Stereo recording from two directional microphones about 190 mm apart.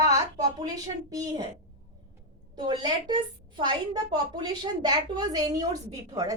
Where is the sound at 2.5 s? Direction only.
25° right (ahead or behind).